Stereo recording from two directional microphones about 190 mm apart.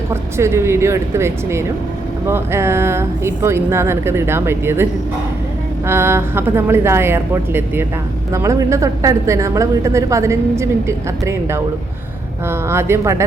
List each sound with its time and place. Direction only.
0.1 s a woman's voice: 15° right (ahead or behind)